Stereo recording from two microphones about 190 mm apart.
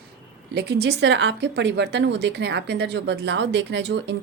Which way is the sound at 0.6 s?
60° right (ahead or behind).